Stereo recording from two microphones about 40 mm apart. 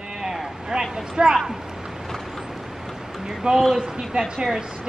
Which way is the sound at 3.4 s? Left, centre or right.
Centre.